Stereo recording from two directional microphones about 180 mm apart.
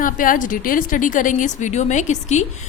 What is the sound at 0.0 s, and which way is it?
A woman's voice, 50° left (ahead or behind).